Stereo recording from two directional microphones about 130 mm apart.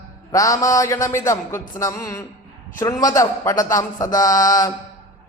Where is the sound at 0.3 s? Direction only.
25° left (ahead or behind).